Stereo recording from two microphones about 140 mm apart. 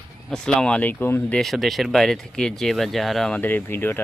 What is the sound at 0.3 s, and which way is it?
Speech, 5° left (ahead or behind).